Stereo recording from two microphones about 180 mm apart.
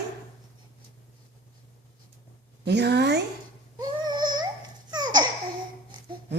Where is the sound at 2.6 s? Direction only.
70° right (ahead or behind).